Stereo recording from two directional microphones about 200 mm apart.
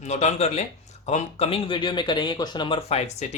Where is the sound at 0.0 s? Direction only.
35° left (ahead or behind).